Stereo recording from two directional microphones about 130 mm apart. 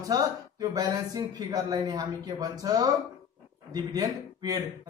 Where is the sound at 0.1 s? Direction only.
30° right (ahead or behind).